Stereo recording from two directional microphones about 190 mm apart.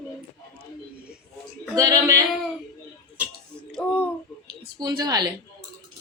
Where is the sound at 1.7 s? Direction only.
20° right (ahead or behind).